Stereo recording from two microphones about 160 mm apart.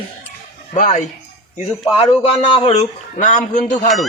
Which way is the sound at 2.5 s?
40° left (ahead or behind).